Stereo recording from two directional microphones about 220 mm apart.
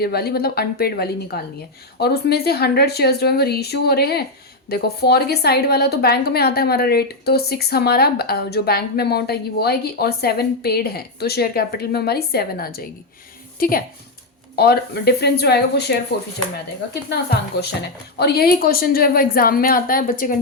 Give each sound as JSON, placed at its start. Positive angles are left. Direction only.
{"t": 0.0, "sound": "a woman's voice", "side_deg": 45}
{"t": 18.2, "sound": "a woman's voice", "side_deg": 45}